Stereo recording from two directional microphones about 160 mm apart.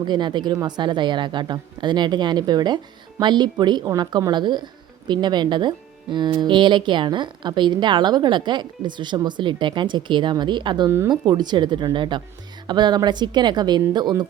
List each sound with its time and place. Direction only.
0.1 s speech: 30° right (ahead or behind)